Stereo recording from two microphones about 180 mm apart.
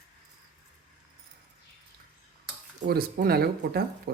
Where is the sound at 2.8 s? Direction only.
60° right (ahead or behind).